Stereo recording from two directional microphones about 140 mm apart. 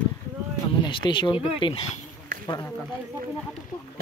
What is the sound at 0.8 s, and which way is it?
Speech, 35° left (ahead or behind).